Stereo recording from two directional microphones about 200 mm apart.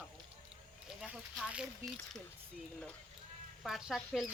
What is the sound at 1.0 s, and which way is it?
Speech, 5° right (ahead or behind).